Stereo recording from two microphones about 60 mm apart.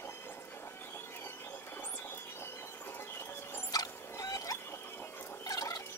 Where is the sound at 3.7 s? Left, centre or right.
Left.